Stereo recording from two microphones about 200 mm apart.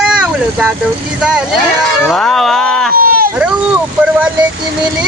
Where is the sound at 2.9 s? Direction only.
45° right (ahead or behind).